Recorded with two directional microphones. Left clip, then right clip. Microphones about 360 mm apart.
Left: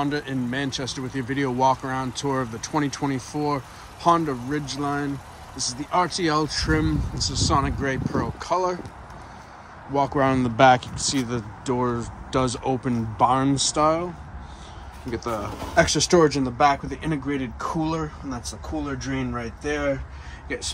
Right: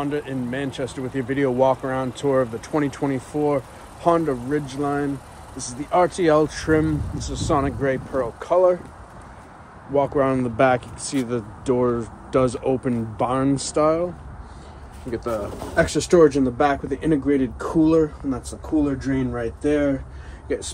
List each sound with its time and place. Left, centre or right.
0.0 s speech: centre
9.9 s speech: centre
15.0 s speech: centre